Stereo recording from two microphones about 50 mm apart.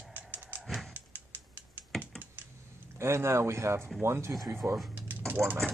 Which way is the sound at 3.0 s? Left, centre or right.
Right.